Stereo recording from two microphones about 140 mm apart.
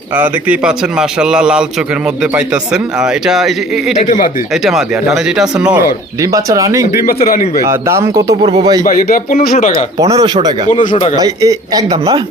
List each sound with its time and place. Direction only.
0.2 s speech: 10° right (ahead or behind)
4.0 s speech: 65° left (ahead or behind)
4.5 s speech: centre (ahead or behind)
6.3 s speech: 25° right (ahead or behind)
8.8 s speech: 85° left
10.0 s speech: 25° right (ahead or behind)